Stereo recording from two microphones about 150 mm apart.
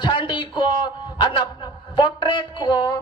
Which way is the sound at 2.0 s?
35° left (ahead or behind).